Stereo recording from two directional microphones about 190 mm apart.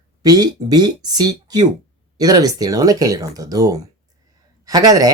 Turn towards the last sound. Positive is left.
turn(degrees=-20)  # may be behind; listen again after turning